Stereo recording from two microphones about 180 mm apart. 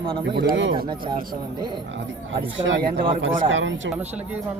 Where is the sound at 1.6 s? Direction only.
25° right (ahead or behind).